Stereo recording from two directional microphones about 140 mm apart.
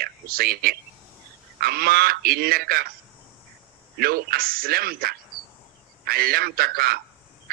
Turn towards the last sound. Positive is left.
turn(degrees=-90)